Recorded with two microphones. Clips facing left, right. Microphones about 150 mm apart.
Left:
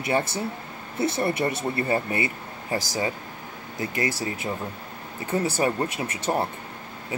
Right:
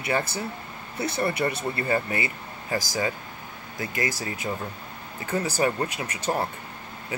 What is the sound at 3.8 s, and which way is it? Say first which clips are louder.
Speech: left 2 dB; 30° left (ahead or behind).